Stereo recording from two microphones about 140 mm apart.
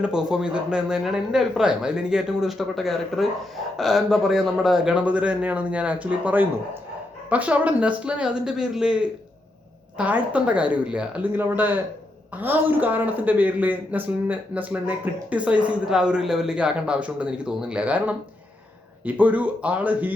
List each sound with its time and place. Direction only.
0.0 s speech: 5° right (ahead or behind)